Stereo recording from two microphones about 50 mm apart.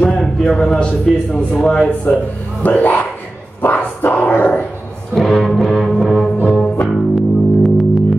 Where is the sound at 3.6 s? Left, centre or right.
Left.